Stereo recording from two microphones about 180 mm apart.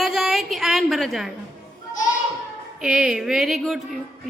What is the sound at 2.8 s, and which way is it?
A woman's voice, 5° right (ahead or behind).